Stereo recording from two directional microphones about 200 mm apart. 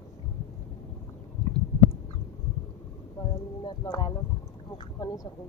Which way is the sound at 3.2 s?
20° left (ahead or behind).